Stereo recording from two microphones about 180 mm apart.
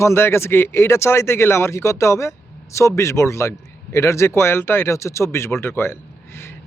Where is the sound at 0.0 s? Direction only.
15° left (ahead or behind).